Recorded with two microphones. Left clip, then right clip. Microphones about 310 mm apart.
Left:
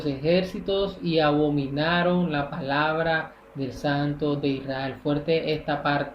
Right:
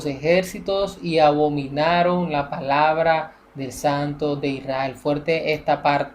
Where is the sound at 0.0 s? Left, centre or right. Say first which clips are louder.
Right 4 dB; right.